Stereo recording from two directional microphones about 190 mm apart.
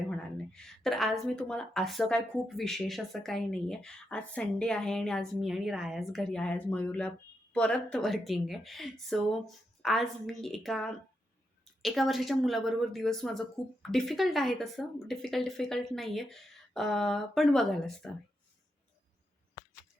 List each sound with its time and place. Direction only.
0.5 s speech: 5° left (ahead or behind)